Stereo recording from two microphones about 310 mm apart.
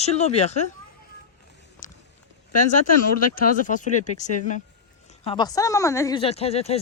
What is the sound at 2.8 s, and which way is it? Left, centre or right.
Speech, left.